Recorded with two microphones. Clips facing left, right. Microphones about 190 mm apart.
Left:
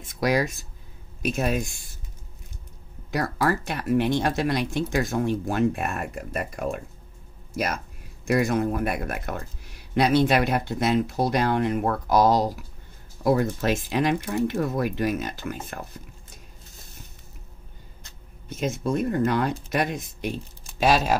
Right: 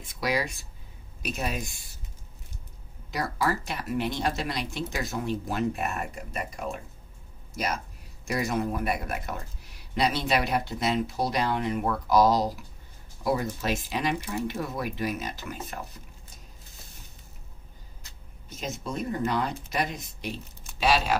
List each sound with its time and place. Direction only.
0.1 s speech: 45° left (ahead or behind)
3.1 s speech: 50° left (ahead or behind)
18.6 s speech: 55° left (ahead or behind)